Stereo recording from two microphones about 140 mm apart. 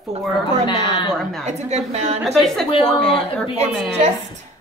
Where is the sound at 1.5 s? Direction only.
50° right (ahead or behind).